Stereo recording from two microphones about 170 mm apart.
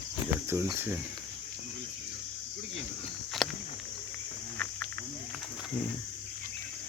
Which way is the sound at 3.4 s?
Centre (ahead or behind).